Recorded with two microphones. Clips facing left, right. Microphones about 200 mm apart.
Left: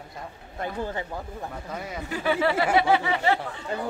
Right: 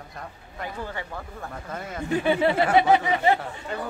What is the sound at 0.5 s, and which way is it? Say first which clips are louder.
Speech: left 3 dB; 20° left (ahead or behind).